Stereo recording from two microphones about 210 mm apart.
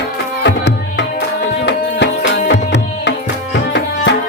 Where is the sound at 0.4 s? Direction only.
55° left (ahead or behind).